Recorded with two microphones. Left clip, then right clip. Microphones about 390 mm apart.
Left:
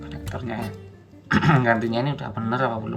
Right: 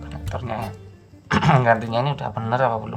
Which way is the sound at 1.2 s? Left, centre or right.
Right.